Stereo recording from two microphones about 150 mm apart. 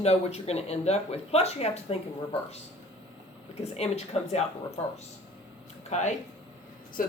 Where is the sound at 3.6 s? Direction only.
45° left (ahead or behind).